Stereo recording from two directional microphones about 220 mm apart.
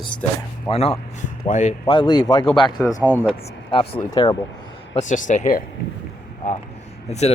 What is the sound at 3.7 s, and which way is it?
Speech, 25° left (ahead or behind).